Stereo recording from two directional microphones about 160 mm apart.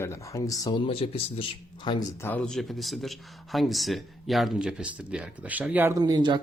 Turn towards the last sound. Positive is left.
turn(degrees=-25)  # may be behind; listen again after turning